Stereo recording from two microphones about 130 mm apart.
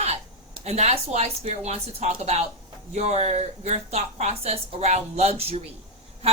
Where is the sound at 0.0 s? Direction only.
55° right (ahead or behind).